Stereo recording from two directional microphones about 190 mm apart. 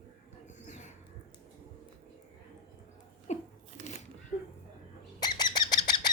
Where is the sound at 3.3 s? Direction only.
35° left (ahead or behind).